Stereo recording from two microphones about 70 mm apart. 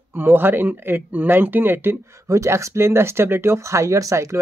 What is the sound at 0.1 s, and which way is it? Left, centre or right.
Speech, right.